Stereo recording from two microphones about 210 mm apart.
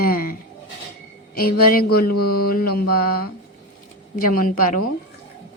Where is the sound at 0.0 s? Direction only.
45° left (ahead or behind).